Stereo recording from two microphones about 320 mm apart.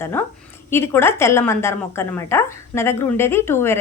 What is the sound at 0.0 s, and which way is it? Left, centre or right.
A woman's voice, centre.